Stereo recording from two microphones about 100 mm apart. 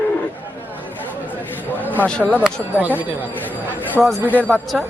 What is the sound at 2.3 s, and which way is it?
Speech, 15° right (ahead or behind).